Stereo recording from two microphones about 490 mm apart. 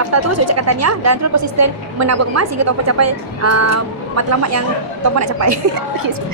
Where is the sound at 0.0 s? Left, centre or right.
Right.